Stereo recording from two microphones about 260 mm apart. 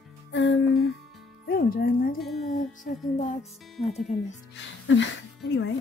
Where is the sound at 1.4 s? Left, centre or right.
Left.